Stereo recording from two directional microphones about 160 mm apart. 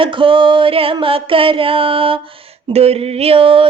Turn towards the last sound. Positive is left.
turn(degrees=-35)  # may be behind; listen again after turning